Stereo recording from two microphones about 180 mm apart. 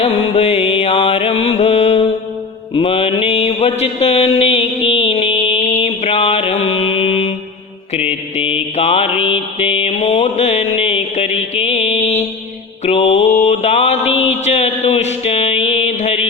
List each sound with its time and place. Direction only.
0.0 s music: 35° left (ahead or behind)
2.7 s mantra: 30° left (ahead or behind)
8.4 s mantra: 35° left (ahead or behind)
9.3 s music: 35° left (ahead or behind)
12.8 s mantra: 35° left (ahead or behind)